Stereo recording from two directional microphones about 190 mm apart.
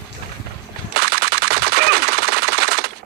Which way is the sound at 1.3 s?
55° right (ahead or behind).